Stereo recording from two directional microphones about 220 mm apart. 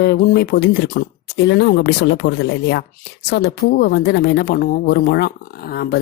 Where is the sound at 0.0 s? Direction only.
45° left (ahead or behind).